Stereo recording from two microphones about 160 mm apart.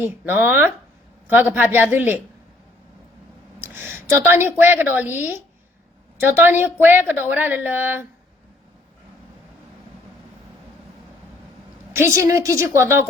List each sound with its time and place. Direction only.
0.0 s a woman's voice: 10° right (ahead or behind)
3.6 s a woman's voice: 15° right (ahead or behind)
11.9 s a woman's voice: 15° right (ahead or behind)